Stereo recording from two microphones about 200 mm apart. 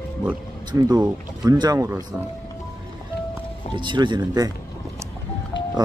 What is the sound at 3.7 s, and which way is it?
Speech, 25° right (ahead or behind).